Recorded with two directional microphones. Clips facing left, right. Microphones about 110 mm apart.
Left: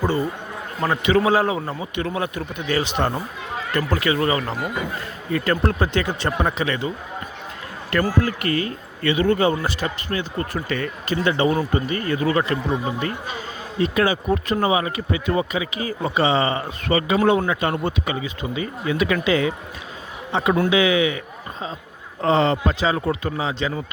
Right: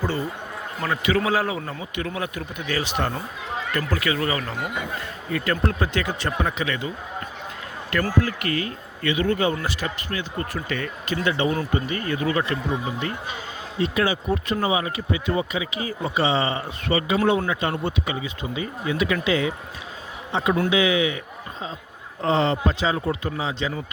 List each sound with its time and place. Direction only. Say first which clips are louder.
0.8 s speech: left 4 dB; 30° left (ahead or behind)
8.2 s speech: left 3 dB; 35° left (ahead or behind)
13.8 s speech: left 3 dB; 45° left (ahead or behind)
22.2 s speech: left 3 dB; 60° left (ahead or behind)